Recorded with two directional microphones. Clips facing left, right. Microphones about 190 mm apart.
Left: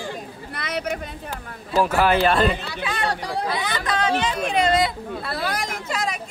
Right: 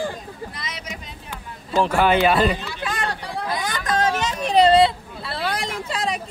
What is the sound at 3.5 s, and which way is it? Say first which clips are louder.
Speech: right 5 dB; 45° right (ahead or behind).